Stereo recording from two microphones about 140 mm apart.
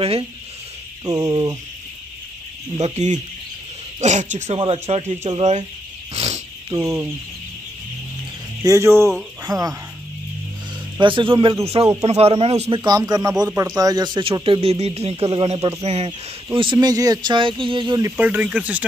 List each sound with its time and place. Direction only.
0.0 s speech: 45° right (ahead or behind)
1.0 s speech: 30° right (ahead or behind)
2.8 s speech: 55° right (ahead or behind)
6.1 s a sound: 50° right (ahead or behind)
6.7 s speech: 20° right (ahead or behind)
8.6 s speech: 20° right (ahead or behind)
11.0 s speech: 35° right (ahead or behind)
12.8 s speech: 30° right (ahead or behind); by 16.1 s 45° right (ahead or behind)
16.1 s speech: 35° right (ahead or behind)
18.0 s speech: 15° right (ahead or behind)